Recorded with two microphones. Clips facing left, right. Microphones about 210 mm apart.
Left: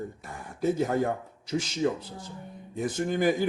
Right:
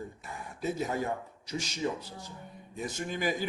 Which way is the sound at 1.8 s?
65° left (ahead or behind).